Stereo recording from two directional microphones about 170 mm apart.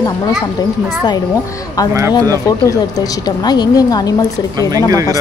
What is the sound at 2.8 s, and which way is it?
A woman's voice, 25° left (ahead or behind).